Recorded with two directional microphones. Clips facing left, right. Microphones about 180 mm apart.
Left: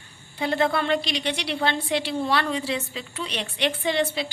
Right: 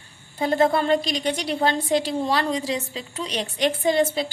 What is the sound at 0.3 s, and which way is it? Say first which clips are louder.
A woman's voice: right 4 dB; 45° right (ahead or behind).